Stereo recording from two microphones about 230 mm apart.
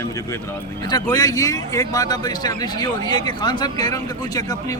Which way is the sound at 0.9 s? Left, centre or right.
Centre.